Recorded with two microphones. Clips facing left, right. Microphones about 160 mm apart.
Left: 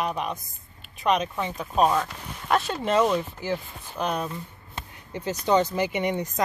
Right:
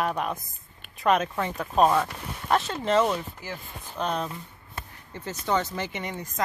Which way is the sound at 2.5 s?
10° left (ahead or behind).